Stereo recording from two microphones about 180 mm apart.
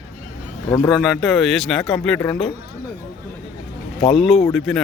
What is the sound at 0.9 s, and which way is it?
Speech, centre (ahead or behind).